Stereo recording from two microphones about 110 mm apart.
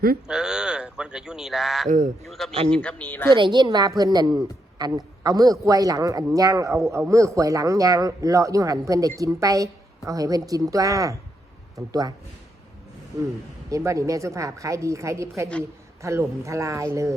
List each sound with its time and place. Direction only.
0.3 s a man's voice: 5° right (ahead or behind); by 3.2 s 15° left (ahead or behind)
3.3 s a woman's voice: 45° right (ahead or behind)
13.7 s a woman's voice: 30° right (ahead or behind)